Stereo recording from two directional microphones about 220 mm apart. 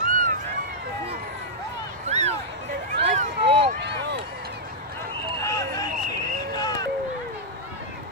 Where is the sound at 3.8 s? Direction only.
50° right (ahead or behind).